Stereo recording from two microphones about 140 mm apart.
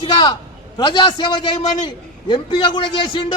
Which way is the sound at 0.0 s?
30° left (ahead or behind).